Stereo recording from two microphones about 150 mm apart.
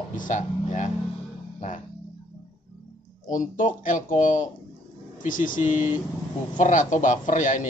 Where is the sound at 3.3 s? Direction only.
60° left (ahead or behind).